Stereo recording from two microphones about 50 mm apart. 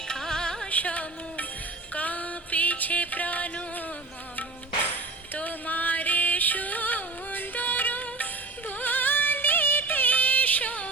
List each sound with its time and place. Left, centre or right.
0.1 s carnatic music: centre
0.7 s music: left
5.3 s music: left